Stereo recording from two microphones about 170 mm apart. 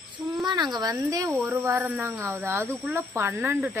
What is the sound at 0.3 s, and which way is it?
Speech, 25° right (ahead or behind).